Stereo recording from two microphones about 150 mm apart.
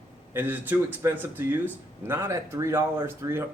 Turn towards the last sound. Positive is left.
turn(degrees=-15)  # may be behind; listen again after turning